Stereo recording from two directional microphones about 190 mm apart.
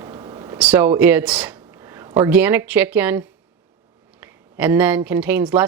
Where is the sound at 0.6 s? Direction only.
10° right (ahead or behind).